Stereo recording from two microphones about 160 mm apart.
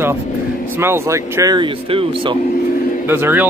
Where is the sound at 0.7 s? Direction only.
15° right (ahead or behind); by 2.3 s 35° right (ahead or behind).